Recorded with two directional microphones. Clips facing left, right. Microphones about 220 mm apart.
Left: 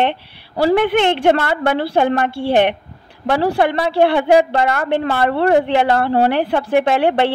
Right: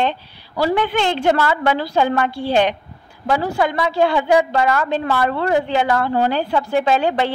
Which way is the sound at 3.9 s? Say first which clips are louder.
Left 3 dB; 60° left (ahead or behind).